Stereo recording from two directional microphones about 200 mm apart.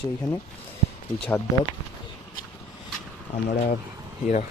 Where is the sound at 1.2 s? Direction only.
10° left (ahead or behind).